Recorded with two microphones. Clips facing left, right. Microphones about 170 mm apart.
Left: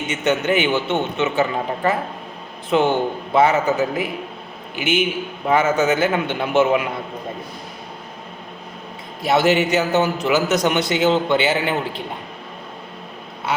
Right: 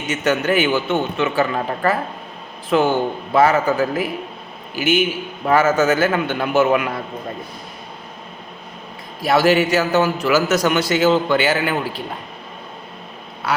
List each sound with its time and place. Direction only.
0.1 s a man's voice: 20° left (ahead or behind)
9.2 s a man's voice: 20° left (ahead or behind)